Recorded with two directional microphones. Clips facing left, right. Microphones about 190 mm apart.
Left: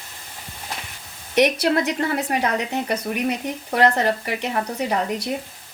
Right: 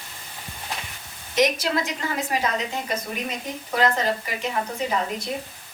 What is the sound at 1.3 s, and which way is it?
Speech, 65° left (ahead or behind).